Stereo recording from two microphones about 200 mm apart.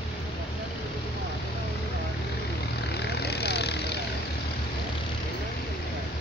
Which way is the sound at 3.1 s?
55° left (ahead or behind).